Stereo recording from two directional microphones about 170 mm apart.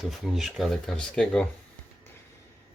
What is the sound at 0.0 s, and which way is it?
Speech, centre (ahead or behind).